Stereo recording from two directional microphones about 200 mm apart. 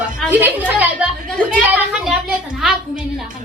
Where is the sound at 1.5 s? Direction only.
5° right (ahead or behind).